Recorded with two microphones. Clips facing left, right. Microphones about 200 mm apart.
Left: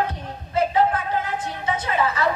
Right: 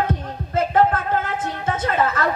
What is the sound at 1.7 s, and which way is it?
Speech, 50° right (ahead or behind).